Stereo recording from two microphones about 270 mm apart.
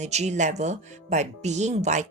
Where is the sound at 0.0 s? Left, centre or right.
Right.